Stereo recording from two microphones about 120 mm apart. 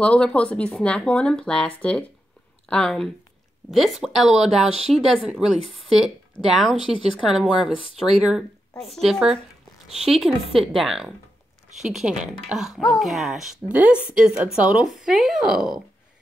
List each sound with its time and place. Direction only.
0.0 s speech: 10° left (ahead or behind)